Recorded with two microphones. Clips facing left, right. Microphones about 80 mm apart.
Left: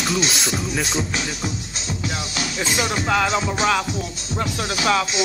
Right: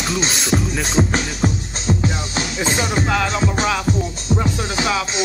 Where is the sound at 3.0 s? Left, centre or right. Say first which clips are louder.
Even; centre.